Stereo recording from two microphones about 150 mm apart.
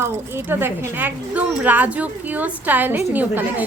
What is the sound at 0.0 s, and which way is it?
Speech, 15° right (ahead or behind).